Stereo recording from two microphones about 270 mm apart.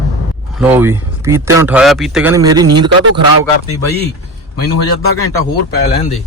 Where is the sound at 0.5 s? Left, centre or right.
Centre.